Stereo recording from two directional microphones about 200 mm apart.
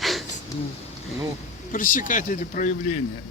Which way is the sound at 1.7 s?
40° left (ahead or behind).